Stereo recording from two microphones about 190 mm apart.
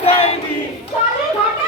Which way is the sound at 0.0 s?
30° left (ahead or behind).